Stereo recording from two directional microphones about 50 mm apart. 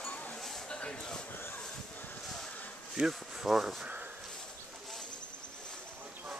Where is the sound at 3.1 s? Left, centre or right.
Centre.